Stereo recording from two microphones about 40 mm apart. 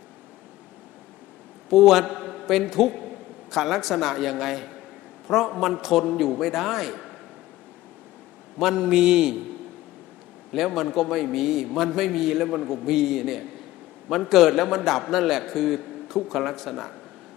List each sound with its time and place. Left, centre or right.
1.7 s a man's voice: centre
8.5 s a man's voice: centre
8.8 s a man's voice: centre
10.5 s a man's voice: centre